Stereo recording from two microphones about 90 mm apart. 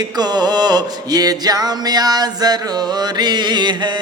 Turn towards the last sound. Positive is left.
turn(degrees=-55)  # may be behind; listen again after turning